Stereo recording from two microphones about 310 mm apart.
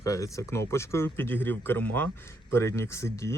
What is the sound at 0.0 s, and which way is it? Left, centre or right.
Speech, centre.